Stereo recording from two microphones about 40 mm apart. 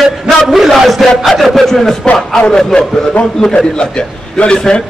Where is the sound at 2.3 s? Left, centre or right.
Left.